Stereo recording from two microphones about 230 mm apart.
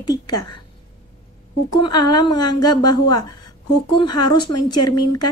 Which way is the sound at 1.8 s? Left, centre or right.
Centre.